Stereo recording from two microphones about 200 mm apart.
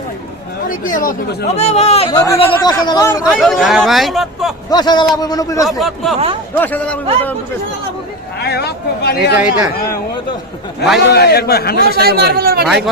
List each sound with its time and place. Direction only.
0.7 s a man's voice: 45° left (ahead or behind)
1.5 s speech: 35° left (ahead or behind)
2.0 s a man's voice: 15° left (ahead or behind)
3.2 s speech: centre (ahead or behind)
4.7 s a man's voice: 20° left (ahead or behind)
5.8 s a man's voice: centre (ahead or behind)
8.4 s speech: 55° left (ahead or behind)
9.3 s speech: 10° right (ahead or behind)
11.1 s a man's voice: 55° left (ahead or behind)
12.0 s speech: 50° right (ahead or behind)
12.6 s speech: centre (ahead or behind)